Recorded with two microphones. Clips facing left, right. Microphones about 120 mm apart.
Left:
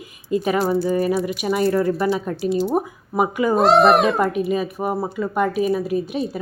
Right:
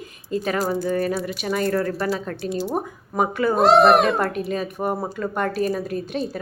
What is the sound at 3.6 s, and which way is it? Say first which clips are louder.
A woman's voice: even; centre (ahead or behind).